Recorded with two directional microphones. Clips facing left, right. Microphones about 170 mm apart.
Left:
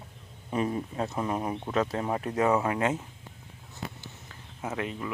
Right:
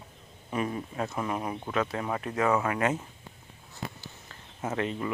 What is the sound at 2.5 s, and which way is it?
Speech, 20° left (ahead or behind).